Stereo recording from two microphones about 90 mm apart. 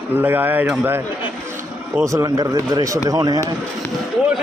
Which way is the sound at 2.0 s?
35° right (ahead or behind).